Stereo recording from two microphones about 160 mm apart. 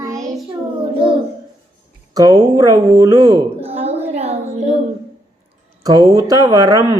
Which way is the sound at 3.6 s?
40° right (ahead or behind).